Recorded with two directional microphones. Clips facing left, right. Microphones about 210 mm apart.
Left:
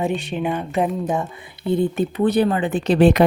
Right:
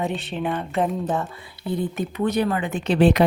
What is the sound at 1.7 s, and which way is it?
Speech, 30° left (ahead or behind).